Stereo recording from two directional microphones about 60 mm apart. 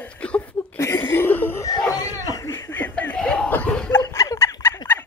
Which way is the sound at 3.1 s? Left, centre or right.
Left.